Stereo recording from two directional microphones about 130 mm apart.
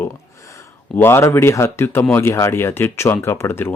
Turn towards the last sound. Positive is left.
turn(degrees=20)  # may be behind; listen again after turning